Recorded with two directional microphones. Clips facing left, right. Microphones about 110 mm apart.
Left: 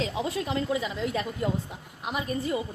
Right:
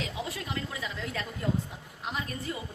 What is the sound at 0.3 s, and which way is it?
A woman's voice, 25° left (ahead or behind).